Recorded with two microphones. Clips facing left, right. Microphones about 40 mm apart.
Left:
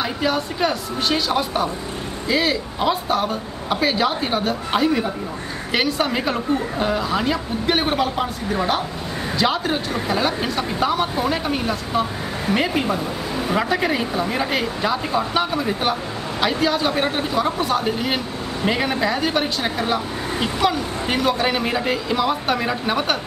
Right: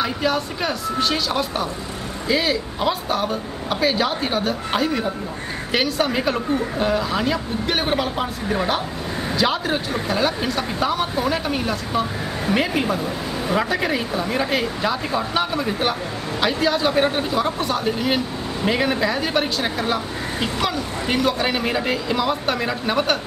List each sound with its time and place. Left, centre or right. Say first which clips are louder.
0.0 s speech: even; centre